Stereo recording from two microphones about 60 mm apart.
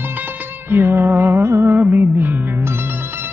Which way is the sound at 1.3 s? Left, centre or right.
Right.